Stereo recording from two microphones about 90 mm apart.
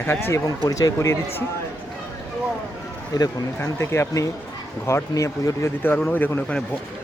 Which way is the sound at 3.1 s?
50° left (ahead or behind).